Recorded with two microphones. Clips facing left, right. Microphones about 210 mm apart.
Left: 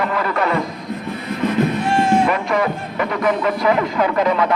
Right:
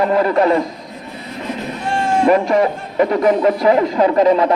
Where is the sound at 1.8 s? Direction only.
5° left (ahead or behind).